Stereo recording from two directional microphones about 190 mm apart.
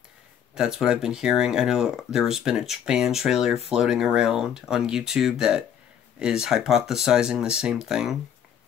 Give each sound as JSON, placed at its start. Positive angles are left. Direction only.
{"t": 0.6, "sound": "speech", "side_deg": -5}